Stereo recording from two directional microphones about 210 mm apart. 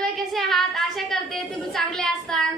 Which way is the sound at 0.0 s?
Centre (ahead or behind).